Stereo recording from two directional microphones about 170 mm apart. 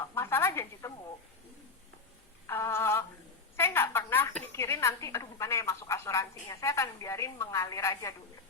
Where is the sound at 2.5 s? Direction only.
15° left (ahead or behind).